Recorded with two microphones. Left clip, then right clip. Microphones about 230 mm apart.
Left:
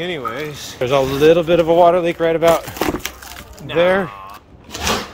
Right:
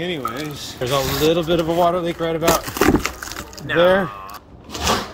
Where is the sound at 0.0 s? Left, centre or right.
Centre.